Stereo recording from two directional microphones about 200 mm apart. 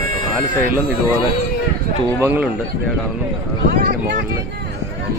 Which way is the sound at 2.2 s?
10° right (ahead or behind).